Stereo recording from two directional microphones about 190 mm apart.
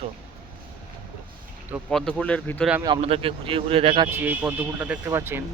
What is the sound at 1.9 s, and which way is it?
Speech, 5° left (ahead or behind).